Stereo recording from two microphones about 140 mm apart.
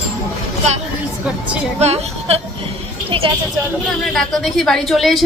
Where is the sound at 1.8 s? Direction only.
50° right (ahead or behind).